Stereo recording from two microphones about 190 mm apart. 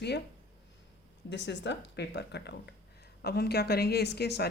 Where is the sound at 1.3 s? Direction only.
65° left (ahead or behind).